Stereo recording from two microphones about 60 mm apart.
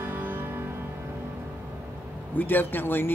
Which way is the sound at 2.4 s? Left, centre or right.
Left.